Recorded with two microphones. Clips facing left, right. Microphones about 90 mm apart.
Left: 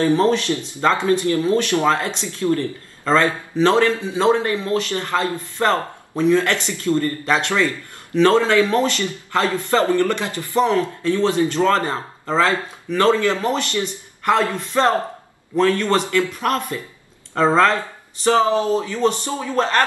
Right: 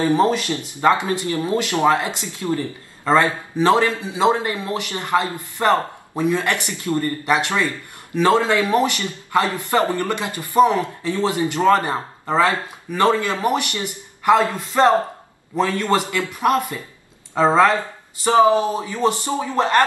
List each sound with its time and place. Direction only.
0.0 s speech: 15° right (ahead or behind)